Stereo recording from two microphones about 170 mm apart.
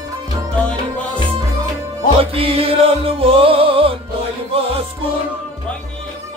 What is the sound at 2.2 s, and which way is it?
Music, 35° right (ahead or behind).